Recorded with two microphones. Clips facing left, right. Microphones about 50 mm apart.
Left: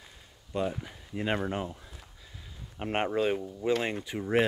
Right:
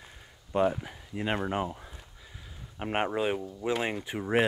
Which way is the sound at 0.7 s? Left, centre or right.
Centre.